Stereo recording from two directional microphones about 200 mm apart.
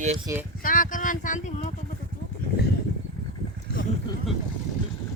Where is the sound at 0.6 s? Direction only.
40° left (ahead or behind).